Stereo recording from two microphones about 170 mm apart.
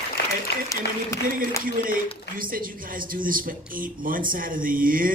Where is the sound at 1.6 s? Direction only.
55° right (ahead or behind).